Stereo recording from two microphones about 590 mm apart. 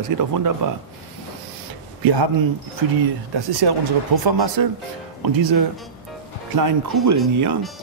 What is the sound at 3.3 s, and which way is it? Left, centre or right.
Speech, right.